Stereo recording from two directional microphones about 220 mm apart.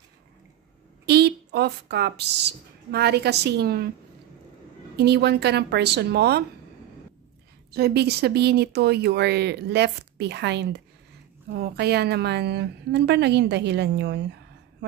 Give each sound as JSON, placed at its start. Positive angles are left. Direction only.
{"t": 1.0, "sound": "a woman's voice", "side_deg": -50}
{"t": 4.9, "sound": "a woman's voice", "side_deg": -50}
{"t": 7.7, "sound": "a woman's voice", "side_deg": -45}